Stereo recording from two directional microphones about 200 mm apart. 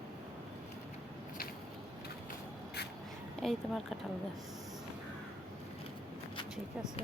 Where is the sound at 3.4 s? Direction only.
Centre (ahead or behind).